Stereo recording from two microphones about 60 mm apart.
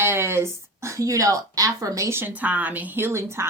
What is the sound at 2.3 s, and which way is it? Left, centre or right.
A woman's voice, right.